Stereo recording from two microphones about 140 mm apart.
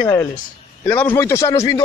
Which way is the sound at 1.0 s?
15° left (ahead or behind).